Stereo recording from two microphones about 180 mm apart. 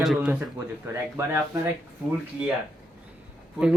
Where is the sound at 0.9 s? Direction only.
15° right (ahead or behind).